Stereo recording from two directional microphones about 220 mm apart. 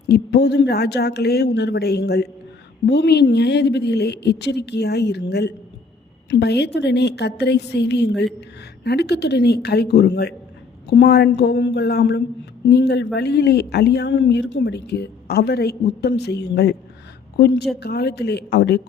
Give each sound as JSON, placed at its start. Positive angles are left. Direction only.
{"t": 0.1, "sound": "a woman's voice", "side_deg": 50}